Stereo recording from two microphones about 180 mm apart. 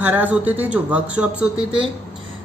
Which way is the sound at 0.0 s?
10° right (ahead or behind).